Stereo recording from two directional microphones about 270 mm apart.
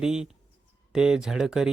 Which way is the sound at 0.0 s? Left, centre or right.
Centre.